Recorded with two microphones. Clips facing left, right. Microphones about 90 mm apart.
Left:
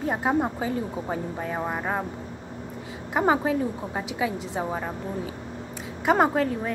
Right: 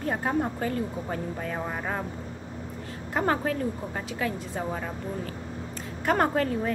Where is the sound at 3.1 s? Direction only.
10° left (ahead or behind).